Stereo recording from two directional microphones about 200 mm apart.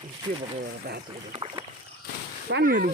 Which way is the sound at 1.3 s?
25° right (ahead or behind).